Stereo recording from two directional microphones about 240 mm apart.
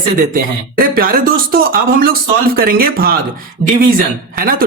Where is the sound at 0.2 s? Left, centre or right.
Right.